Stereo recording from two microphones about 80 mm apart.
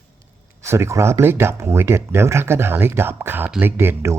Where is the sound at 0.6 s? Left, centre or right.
Right.